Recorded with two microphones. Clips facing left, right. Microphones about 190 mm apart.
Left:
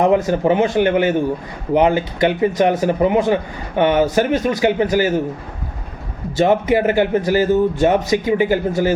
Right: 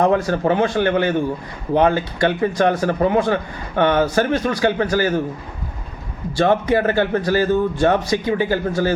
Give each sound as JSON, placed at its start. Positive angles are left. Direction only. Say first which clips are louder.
{"t": 0.0, "sound": "a man's voice", "louder": "left 2 dB", "side_deg": 20}
{"t": 6.3, "sound": "a man's voice", "louder": "left 2 dB", "side_deg": 20}